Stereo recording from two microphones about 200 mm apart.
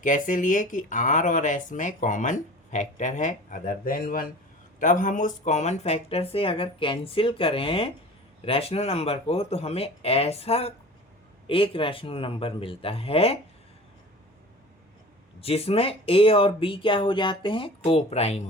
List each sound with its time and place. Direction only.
0.0 s speech: 40° left (ahead or behind)
15.4 s speech: 30° left (ahead or behind)